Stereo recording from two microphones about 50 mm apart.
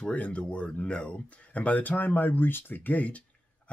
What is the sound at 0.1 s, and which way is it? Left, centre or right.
Speech, left.